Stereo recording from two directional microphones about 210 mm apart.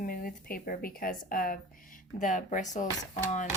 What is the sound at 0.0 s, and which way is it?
Speech, 45° left (ahead or behind).